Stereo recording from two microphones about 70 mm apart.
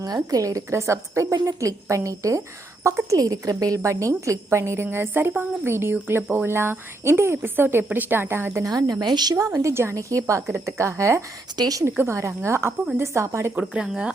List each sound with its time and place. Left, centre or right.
0.0 s a woman's voice: right
8.6 s speech: right
9.5 s a woman's voice: right
11.5 s speech: right
11.9 s a woman's voice: right
13.8 s speech: centre